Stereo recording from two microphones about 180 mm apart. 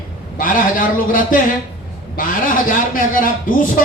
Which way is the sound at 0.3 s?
50° left (ahead or behind).